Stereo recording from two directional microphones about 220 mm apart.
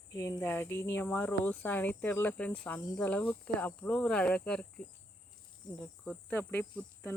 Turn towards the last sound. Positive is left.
turn(degrees=10)  # may be behind; listen again after turning